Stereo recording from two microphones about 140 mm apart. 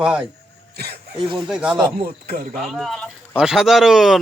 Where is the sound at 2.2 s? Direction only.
90° right.